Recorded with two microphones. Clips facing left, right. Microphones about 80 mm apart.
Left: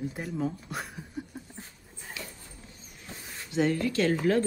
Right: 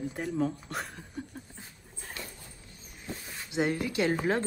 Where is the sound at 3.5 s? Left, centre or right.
Right.